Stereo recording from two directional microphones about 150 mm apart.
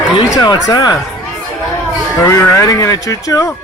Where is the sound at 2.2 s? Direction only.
20° left (ahead or behind).